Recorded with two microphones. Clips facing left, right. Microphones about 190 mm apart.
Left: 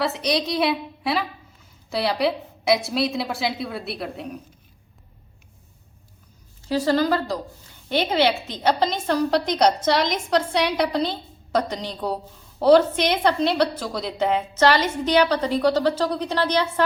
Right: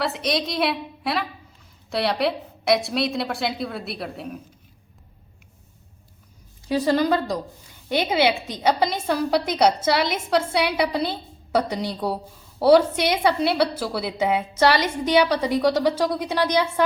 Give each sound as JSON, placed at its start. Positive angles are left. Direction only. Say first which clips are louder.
{"t": 0.0, "sound": "a woman's voice", "louder": "left 1 dB", "side_deg": 0}
{"t": 6.7, "sound": "a woman's voice", "louder": "even", "side_deg": -15}